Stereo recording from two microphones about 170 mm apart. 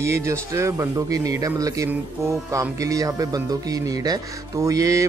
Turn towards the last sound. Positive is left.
turn(degrees=-20)  # may be behind; listen again after turning